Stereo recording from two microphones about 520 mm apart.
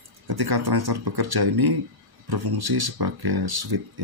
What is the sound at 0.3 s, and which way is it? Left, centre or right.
Speech, right.